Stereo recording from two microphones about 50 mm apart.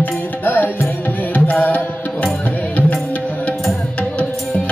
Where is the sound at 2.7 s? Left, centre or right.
Left.